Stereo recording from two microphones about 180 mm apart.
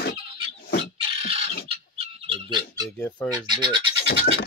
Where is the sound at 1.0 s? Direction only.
30° right (ahead or behind).